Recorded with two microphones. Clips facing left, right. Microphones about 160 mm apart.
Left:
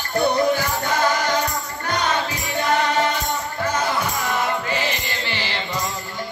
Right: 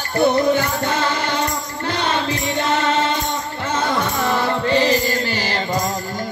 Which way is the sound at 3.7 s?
30° right (ahead or behind).